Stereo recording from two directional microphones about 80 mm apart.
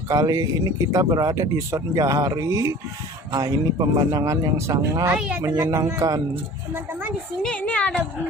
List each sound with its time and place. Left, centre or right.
0.1 s speech: right
5.0 s speech: centre
5.7 s a man's voice: right
7.4 s a woman's voice: centre